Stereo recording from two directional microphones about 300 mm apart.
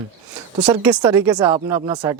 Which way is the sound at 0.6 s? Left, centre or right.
Centre.